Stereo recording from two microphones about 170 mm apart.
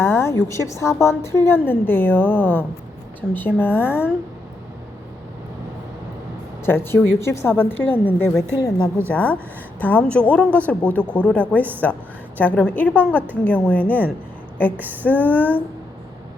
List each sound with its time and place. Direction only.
0.0 s a sound: 15° left (ahead or behind)
0.4 s a woman's voice: 15° left (ahead or behind)
6.7 s a woman's voice: 15° left (ahead or behind)
8.5 s a woman's voice: 25° left (ahead or behind)
9.0 s a woman's voice: 10° left (ahead or behind)
15.2 s a woman's voice: 10° left (ahead or behind)